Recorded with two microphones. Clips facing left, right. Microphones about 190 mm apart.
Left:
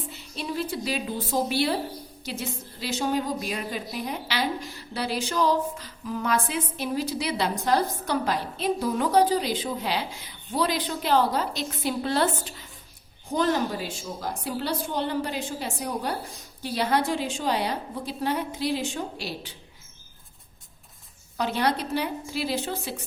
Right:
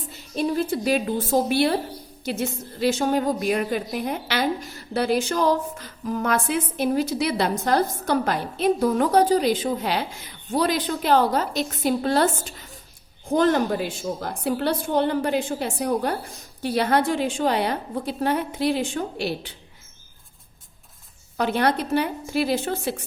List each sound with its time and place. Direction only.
0.3 s a woman's voice: 50° right (ahead or behind)
21.3 s a woman's voice: 55° right (ahead or behind)